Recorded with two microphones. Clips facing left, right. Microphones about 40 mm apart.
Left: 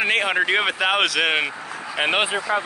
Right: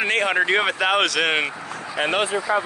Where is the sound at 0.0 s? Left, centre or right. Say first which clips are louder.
Even; centre.